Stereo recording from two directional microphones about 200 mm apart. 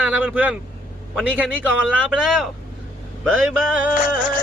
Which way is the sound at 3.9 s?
45° left (ahead or behind).